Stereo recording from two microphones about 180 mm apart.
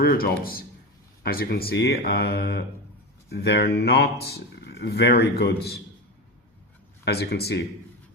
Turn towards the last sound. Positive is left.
turn(degrees=60)  # may be behind; listen again after turning